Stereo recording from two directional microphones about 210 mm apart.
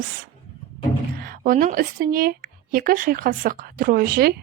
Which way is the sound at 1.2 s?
40° right (ahead or behind).